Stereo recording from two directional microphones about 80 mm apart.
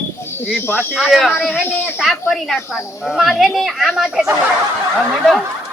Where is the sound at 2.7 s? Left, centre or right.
Centre.